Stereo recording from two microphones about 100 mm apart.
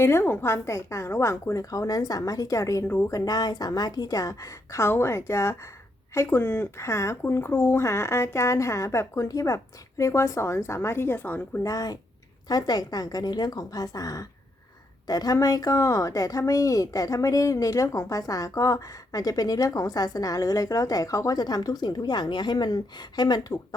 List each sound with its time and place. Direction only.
0.0 s speech: 25° left (ahead or behind)
2.8 s speech: 20° left (ahead or behind)
3.1 s a woman's voice: 35° left (ahead or behind); by 11.6 s 20° left (ahead or behind)
11.6 s a woman's voice: 40° left (ahead or behind)